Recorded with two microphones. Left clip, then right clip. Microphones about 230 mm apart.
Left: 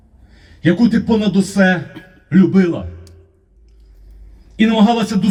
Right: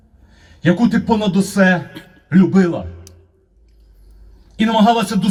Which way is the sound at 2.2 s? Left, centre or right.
Right.